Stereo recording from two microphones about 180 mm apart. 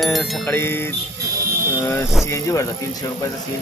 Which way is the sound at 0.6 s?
10° left (ahead or behind).